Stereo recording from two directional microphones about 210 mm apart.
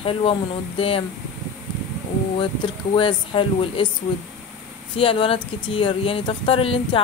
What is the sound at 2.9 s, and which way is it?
Speech, 25° left (ahead or behind).